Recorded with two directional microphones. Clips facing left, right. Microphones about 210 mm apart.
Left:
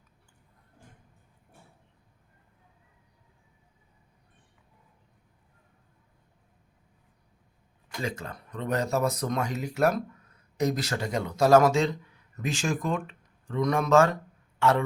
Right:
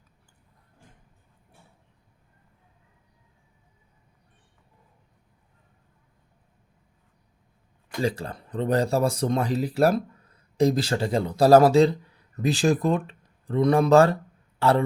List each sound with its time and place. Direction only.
8.0 s speech: 35° right (ahead or behind)